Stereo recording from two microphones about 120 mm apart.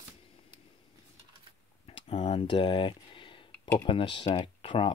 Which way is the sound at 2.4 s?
40° left (ahead or behind).